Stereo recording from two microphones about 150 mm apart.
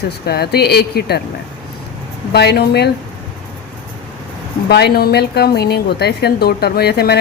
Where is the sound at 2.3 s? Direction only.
90° left.